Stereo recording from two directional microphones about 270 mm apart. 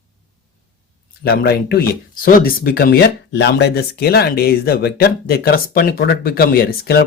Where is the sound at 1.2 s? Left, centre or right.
Left.